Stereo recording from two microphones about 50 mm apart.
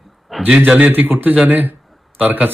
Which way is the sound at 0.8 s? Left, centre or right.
Right.